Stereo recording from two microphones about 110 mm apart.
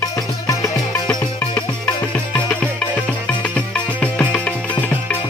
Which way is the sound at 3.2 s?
10° left (ahead or behind).